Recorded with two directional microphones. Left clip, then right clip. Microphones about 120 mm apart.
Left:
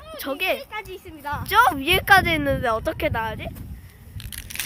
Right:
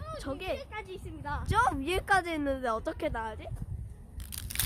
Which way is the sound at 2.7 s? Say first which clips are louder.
Left 9 dB; 5° left (ahead or behind).